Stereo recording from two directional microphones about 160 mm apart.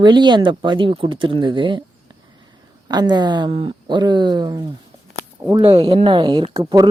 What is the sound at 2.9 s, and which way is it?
Speech, 25° right (ahead or behind).